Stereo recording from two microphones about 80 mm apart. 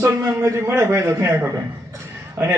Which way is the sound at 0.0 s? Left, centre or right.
Right.